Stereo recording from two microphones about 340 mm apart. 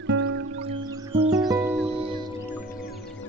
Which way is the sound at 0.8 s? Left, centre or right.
Centre.